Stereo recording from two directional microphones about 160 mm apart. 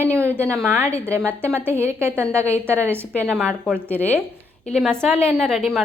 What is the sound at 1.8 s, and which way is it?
A woman's voice, 15° right (ahead or behind).